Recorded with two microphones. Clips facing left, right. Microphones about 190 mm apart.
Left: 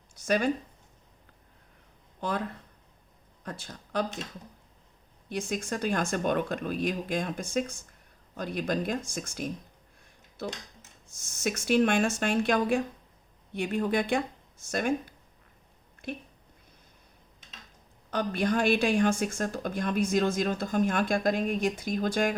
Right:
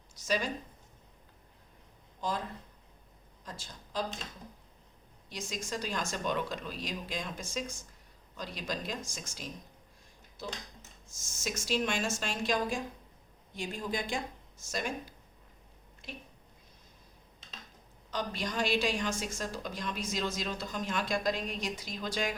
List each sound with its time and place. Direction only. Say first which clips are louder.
0.2 s speech: left 7 dB; 55° left (ahead or behind)
2.2 s speech: left 3 dB; 60° left (ahead or behind)
3.4 s speech: left 6 dB; 60° left (ahead or behind)
5.3 s speech: left 7 dB; 55° left (ahead or behind)
16.0 s a sound: left 10 dB; 55° left (ahead or behind)
18.1 s a woman's voice: left 8 dB; 55° left (ahead or behind)